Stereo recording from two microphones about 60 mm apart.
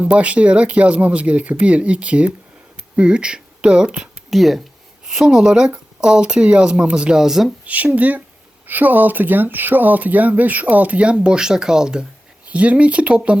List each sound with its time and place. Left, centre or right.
0.0 s speech: right
4.3 s speech: centre
7.6 s speech: right